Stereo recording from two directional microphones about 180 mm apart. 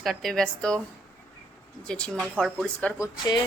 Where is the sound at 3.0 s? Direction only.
20° left (ahead or behind).